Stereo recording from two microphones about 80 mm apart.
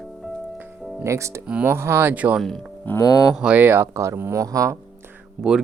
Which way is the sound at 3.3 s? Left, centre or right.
Centre.